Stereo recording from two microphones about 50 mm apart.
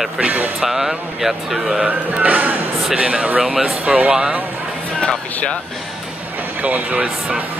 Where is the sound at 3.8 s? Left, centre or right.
Right.